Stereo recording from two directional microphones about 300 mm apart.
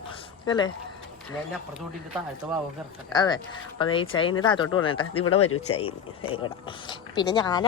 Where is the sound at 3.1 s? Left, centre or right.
Centre.